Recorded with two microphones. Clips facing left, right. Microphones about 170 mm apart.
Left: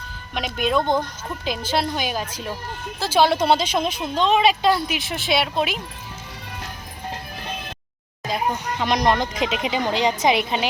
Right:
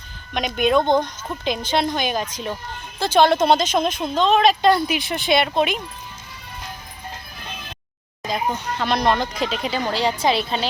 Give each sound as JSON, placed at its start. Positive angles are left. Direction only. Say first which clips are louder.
{"t": 0.3, "sound": "speech", "louder": "right 4 dB", "side_deg": 0}
{"t": 0.8, "sound": "speech", "louder": "right 2 dB", "side_deg": -20}
{"t": 1.0, "sound": "speech", "louder": "right 2 dB", "side_deg": 5}
{"t": 8.3, "sound": "speech", "louder": "even", "side_deg": 10}